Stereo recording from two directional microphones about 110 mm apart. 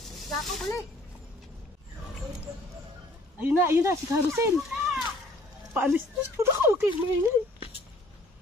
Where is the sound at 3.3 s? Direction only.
20° right (ahead or behind).